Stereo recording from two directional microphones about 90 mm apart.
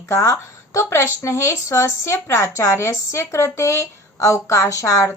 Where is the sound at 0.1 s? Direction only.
35° left (ahead or behind).